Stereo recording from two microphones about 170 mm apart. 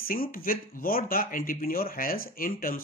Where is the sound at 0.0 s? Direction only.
55° left (ahead or behind).